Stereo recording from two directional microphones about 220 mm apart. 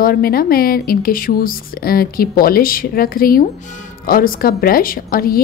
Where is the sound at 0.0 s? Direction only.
45° left (ahead or behind).